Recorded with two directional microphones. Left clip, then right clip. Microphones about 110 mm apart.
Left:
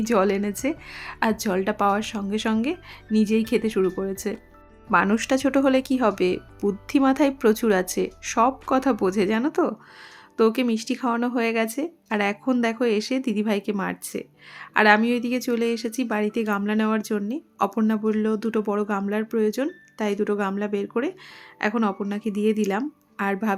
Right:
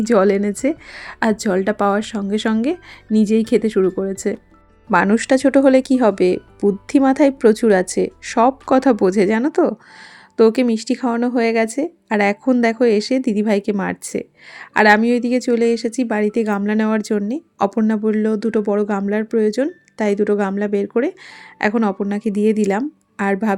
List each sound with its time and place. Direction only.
0.0 s a woman's voice: 45° right (ahead or behind)
8.4 s a woman's voice: 50° right (ahead or behind)